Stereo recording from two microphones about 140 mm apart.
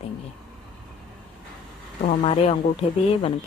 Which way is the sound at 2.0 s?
65° left (ahead or behind).